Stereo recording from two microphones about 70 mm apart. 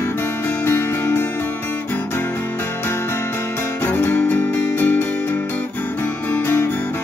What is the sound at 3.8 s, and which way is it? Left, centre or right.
Music, left.